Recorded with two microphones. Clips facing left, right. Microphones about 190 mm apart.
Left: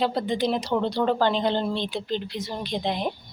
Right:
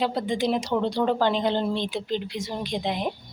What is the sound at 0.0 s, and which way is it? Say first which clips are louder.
A woman's voice: left 1 dB; 15° right (ahead or behind).